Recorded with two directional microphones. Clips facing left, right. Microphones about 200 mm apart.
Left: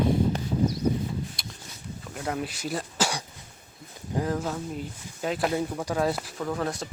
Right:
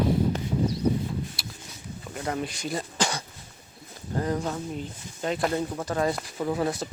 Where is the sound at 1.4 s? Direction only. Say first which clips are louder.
Right 1 dB; 5° right (ahead or behind).